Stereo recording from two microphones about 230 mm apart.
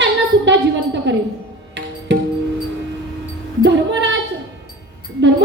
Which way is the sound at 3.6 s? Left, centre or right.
Right.